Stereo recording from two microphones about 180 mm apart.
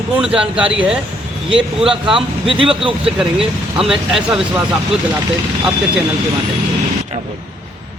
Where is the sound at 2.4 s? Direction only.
30° right (ahead or behind).